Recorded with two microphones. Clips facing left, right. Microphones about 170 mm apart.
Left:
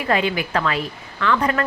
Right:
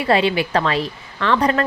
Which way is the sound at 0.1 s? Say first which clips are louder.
Right 4 dB; 25° right (ahead or behind).